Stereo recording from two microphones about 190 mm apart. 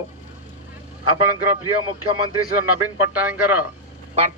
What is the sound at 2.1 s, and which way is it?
Speech, 25° right (ahead or behind).